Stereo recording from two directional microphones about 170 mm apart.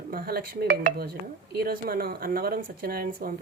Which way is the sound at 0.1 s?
60° right (ahead or behind).